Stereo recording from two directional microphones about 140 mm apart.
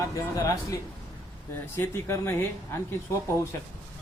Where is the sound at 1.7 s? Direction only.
20° left (ahead or behind).